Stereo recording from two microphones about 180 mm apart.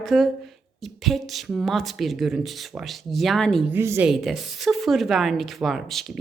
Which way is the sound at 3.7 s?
15° right (ahead or behind).